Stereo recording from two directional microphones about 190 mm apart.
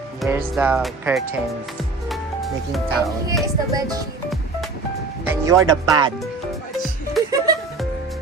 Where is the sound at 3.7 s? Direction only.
20° right (ahead or behind).